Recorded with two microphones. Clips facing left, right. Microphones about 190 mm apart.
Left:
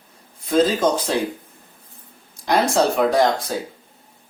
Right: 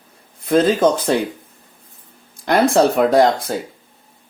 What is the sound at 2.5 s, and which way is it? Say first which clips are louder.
Speech: right 4 dB; 60° right (ahead or behind).